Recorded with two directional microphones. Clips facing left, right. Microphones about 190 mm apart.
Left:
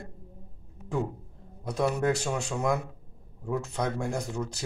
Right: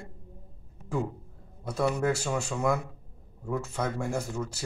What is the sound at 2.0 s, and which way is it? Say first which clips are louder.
Speech: left 1 dB; 15° left (ahead or behind).